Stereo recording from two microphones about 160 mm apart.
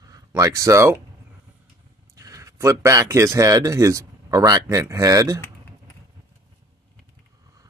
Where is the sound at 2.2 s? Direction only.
20° right (ahead or behind).